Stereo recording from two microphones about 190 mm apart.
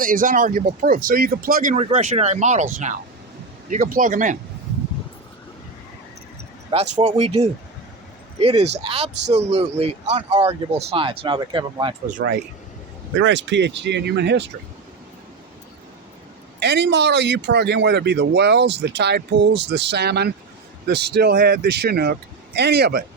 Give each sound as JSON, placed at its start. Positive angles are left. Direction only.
{"t": 0.0, "sound": "speech", "side_deg": -45}
{"t": 1.8, "sound": "speech", "side_deg": -35}
{"t": 3.7, "sound": "speech", "side_deg": -45}
{"t": 6.7, "sound": "speech", "side_deg": -30}
{"t": 12.1, "sound": "speech", "side_deg": -55}
{"t": 13.1, "sound": "speech", "side_deg": -70}
{"t": 16.6, "sound": "speech", "side_deg": -65}